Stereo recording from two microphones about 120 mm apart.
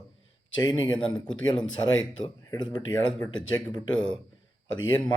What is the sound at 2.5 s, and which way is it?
Speech, 35° left (ahead or behind).